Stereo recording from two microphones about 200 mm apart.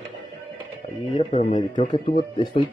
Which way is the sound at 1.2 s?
30° left (ahead or behind).